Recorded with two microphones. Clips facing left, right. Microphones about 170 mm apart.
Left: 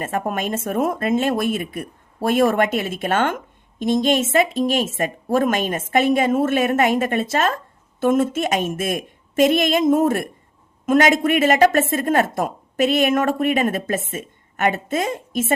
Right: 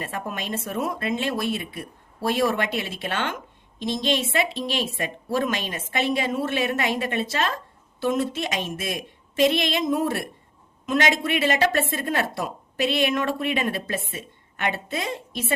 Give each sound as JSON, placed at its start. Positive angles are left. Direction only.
{"t": 0.0, "sound": "speech", "side_deg": 45}